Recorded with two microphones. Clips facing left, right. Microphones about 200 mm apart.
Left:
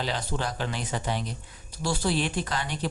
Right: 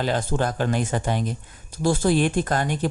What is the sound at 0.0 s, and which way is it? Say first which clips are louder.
Speech: right 7 dB; 50° right (ahead or behind).